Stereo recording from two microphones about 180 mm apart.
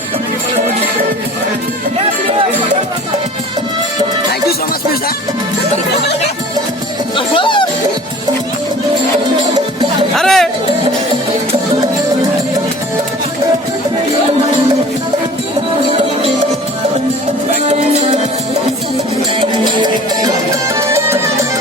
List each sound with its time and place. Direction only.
7.2 s music: 25° left (ahead or behind)
10.2 s music: centre (ahead or behind)
19.4 s music: 25° right (ahead or behind)
20.7 s music: 15° right (ahead or behind)